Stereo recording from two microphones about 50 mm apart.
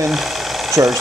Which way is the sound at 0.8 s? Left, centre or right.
Right.